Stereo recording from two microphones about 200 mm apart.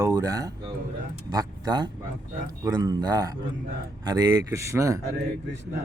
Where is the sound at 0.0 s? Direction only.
15° right (ahead or behind).